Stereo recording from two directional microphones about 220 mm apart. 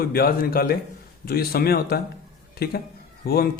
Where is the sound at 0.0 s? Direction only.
45° left (ahead or behind).